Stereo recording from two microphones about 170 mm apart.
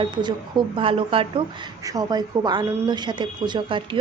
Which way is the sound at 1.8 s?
20° right (ahead or behind).